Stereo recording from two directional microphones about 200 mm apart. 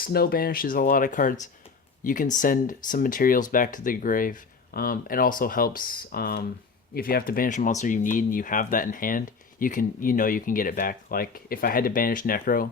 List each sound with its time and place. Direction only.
0.0 s speech: 50° left (ahead or behind)